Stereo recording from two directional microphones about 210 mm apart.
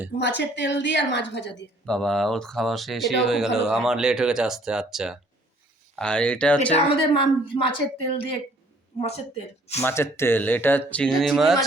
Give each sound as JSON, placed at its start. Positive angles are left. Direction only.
{"t": 0.2, "sound": "a woman's voice", "side_deg": 55}
{"t": 1.9, "sound": "speech", "side_deg": 0}
{"t": 6.7, "sound": "speech", "side_deg": 25}
{"t": 9.8, "sound": "speech", "side_deg": 10}